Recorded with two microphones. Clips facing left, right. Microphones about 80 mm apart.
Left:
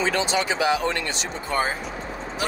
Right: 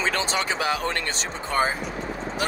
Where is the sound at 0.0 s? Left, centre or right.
Right.